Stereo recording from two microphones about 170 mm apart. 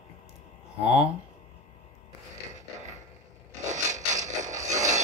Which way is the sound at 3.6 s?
45° right (ahead or behind).